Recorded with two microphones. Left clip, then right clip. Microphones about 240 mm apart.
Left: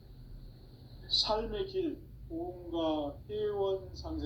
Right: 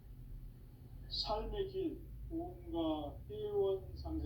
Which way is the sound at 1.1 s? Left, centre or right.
Left.